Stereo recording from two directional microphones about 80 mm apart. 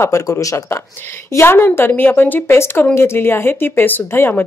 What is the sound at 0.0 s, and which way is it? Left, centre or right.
Speech, left.